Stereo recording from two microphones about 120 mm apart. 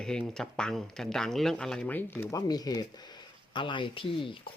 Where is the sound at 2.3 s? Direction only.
35° left (ahead or behind).